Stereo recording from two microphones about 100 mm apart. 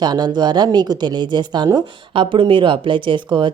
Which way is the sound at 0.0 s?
45° right (ahead or behind).